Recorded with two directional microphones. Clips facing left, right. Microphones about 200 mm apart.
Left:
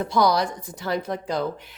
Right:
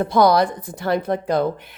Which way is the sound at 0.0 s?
55° right (ahead or behind).